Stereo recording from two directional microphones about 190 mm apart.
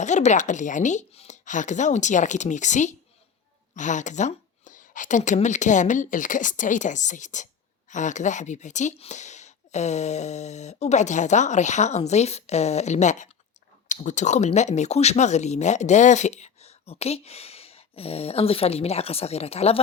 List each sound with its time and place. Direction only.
0.0 s speech: 40° left (ahead or behind)